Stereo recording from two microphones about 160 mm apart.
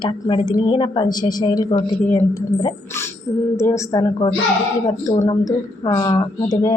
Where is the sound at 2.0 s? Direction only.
10° left (ahead or behind).